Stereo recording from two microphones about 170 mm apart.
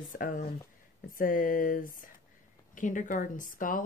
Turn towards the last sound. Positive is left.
turn(degrees=50)  # may be behind; listen again after turning